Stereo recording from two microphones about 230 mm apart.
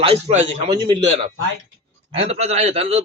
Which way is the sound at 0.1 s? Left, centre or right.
Right.